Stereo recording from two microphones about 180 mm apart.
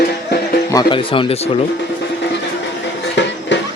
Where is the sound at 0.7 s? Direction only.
25° left (ahead or behind).